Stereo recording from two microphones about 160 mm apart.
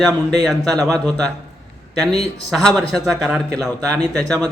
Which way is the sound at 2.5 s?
Centre (ahead or behind).